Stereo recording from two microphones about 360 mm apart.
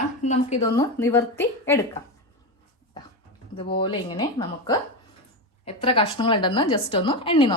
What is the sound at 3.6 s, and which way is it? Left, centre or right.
A woman's voice, centre.